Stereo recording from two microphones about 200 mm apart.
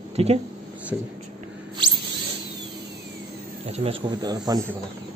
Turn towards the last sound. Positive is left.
turn(degrees=-20)  # may be behind; listen again after turning